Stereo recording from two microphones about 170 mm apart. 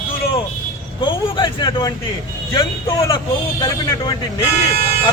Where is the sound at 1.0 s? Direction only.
30° left (ahead or behind).